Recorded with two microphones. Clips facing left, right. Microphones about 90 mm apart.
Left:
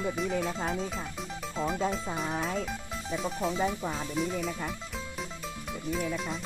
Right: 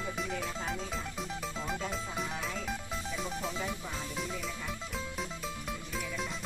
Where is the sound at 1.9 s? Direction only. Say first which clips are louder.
Left 4 dB; centre (ahead or behind).